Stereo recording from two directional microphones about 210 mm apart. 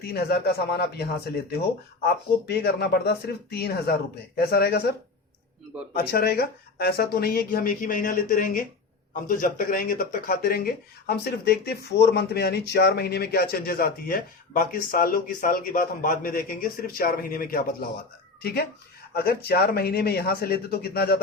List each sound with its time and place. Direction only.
0.0 s speech: 50° left (ahead or behind)
2.0 s speech: 50° left (ahead or behind)
19.1 s speech: 50° left (ahead or behind)